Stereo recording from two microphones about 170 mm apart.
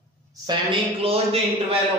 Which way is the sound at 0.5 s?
30° right (ahead or behind).